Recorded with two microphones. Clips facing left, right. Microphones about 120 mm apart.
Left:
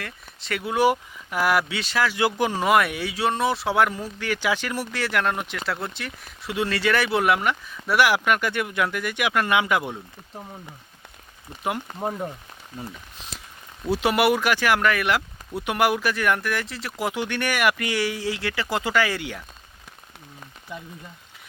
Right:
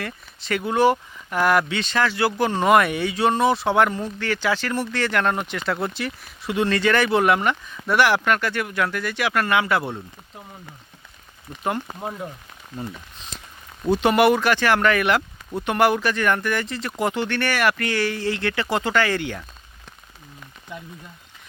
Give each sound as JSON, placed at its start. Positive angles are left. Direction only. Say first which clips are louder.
{"t": 0.0, "sound": "speech", "louder": "right 5 dB", "side_deg": 0}
{"t": 2.6, "sound": "speech", "louder": "right 4 dB", "side_deg": 5}
{"t": 11.9, "sound": "speech", "louder": "left 3 dB", "side_deg": 15}
{"t": 13.8, "sound": "speech", "louder": "right 4 dB", "side_deg": 5}